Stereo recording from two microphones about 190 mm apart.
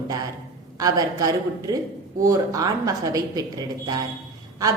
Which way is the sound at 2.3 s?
15° right (ahead or behind).